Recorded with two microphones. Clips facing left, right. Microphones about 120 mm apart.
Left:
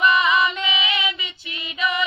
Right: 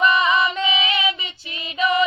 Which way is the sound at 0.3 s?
35° right (ahead or behind).